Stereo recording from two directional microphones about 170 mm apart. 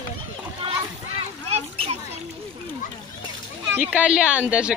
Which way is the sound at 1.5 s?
40° right (ahead or behind).